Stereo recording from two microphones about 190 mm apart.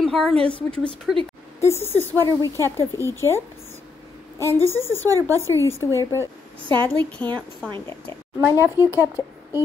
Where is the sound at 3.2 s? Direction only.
15° left (ahead or behind).